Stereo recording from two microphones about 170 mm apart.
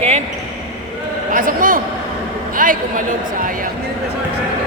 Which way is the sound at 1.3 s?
55° right (ahead or behind).